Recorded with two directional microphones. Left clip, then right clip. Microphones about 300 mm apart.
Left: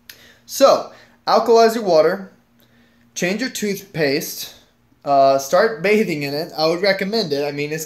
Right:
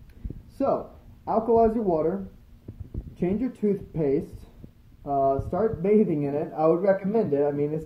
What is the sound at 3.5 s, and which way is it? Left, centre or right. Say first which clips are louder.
Speech: left 3 dB; left.